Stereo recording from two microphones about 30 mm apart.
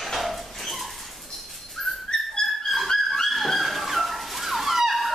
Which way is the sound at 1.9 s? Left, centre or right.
Centre.